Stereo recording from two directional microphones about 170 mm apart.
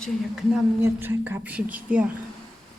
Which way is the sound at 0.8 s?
10° right (ahead or behind).